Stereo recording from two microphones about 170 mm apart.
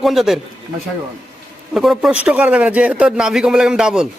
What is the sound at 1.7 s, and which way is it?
A man's voice, 5° right (ahead or behind).